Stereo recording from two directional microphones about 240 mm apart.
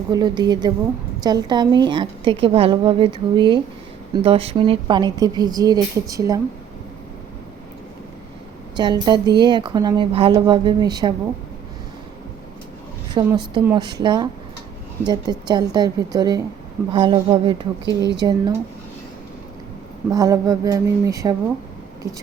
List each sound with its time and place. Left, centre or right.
0.1 s a woman's voice: centre
8.7 s a woman's voice: centre
13.1 s a woman's voice: centre
20.1 s a woman's voice: centre